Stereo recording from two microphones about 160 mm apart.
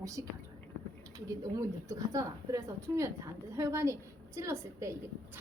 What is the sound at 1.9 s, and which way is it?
A woman's voice, 20° right (ahead or behind).